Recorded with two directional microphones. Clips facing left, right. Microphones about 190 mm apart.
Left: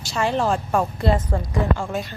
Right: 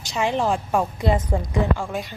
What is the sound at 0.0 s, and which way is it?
A woman's voice, 15° right (ahead or behind).